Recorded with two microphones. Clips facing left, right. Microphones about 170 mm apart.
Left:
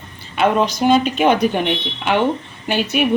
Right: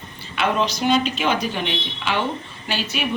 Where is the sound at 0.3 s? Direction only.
50° left (ahead or behind).